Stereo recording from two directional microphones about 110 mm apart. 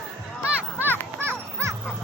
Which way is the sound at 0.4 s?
20° right (ahead or behind).